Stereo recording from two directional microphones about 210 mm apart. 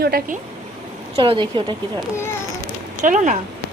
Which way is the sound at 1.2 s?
25° right (ahead or behind).